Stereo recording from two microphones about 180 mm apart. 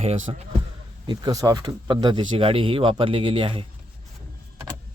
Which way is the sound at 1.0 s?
25° right (ahead or behind).